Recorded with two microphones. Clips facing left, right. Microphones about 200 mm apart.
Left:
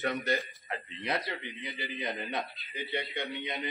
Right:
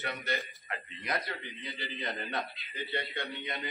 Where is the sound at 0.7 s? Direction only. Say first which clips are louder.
Left 3 dB; 30° left (ahead or behind).